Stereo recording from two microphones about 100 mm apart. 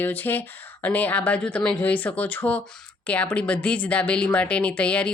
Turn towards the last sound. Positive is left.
turn(degrees=10)  # may be behind; listen again after turning